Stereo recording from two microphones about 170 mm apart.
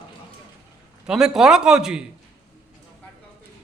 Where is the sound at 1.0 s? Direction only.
5° right (ahead or behind).